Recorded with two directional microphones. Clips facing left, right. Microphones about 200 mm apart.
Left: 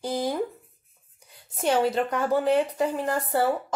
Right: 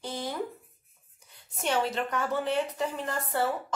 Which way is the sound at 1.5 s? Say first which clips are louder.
Left 6 dB; 35° left (ahead or behind).